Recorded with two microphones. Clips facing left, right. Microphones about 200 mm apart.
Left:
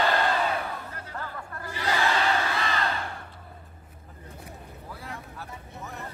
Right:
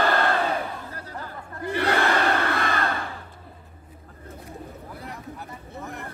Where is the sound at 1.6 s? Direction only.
60° right (ahead or behind).